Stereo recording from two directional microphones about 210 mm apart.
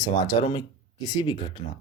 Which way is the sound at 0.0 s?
20° left (ahead or behind).